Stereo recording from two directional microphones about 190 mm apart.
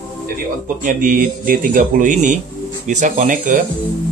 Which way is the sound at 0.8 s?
45° right (ahead or behind).